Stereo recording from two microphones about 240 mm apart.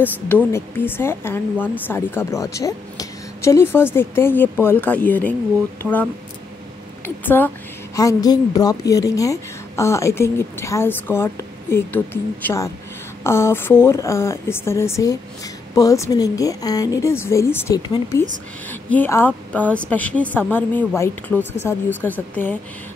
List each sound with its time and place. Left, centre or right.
0.5 s speech: centre
7.2 s speech: centre